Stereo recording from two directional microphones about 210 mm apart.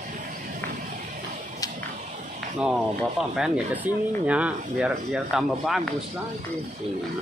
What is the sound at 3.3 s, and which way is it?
Speech, 5° right (ahead or behind).